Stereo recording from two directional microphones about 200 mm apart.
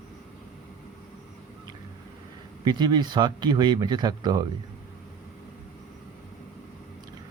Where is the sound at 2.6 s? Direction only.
20° right (ahead or behind).